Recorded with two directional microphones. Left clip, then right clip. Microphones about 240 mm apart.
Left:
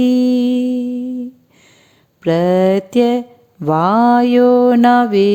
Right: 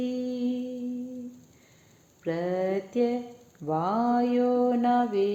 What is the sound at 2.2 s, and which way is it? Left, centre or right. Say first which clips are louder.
Mantra: left 15 dB; left.